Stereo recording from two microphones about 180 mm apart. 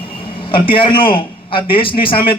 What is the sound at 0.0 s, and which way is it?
A man's voice, 30° left (ahead or behind).